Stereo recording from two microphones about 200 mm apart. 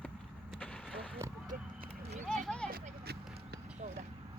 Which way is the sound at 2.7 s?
50° right (ahead or behind).